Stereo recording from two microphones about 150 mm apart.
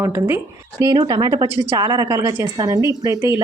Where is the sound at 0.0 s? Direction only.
20° right (ahead or behind).